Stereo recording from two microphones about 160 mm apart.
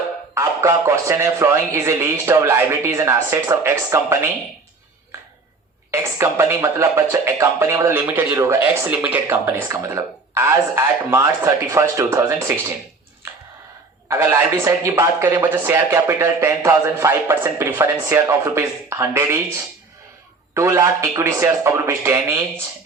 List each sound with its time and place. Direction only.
0.3 s speech: 20° right (ahead or behind)
5.9 s speech: 15° right (ahead or behind)
14.1 s a man's voice: 15° right (ahead or behind)